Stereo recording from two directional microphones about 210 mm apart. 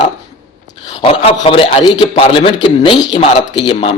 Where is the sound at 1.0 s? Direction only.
30° left (ahead or behind).